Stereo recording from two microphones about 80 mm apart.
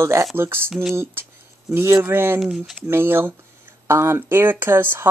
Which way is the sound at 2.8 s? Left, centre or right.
Right.